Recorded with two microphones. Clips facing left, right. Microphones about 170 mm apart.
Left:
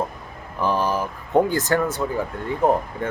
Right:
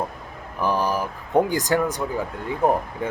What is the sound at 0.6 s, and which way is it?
Speech, 15° right (ahead or behind).